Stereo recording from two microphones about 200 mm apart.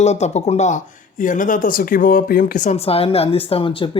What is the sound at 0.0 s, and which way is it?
Speech, 35° left (ahead or behind).